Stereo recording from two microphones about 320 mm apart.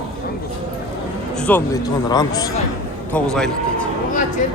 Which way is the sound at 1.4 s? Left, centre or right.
Centre.